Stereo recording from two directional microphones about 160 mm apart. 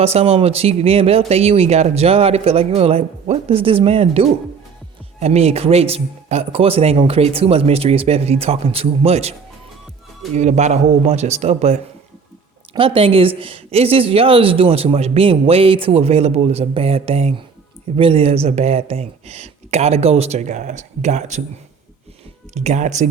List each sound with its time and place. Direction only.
0.0 s a woman's voice: 40° right (ahead or behind)
10.3 s a man's voice: 45° right (ahead or behind)
22.5 s a man's voice: 45° right (ahead or behind)